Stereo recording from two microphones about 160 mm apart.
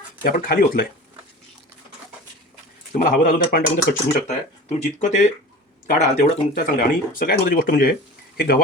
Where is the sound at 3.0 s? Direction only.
55° left (ahead or behind).